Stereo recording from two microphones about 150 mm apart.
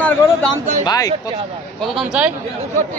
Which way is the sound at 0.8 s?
25° left (ahead or behind).